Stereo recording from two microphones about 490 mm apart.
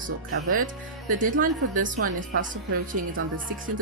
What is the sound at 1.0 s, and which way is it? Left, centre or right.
A woman's voice, centre.